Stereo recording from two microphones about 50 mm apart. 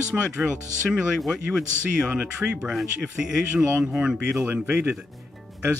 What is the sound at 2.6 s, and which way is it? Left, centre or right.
Speech, centre.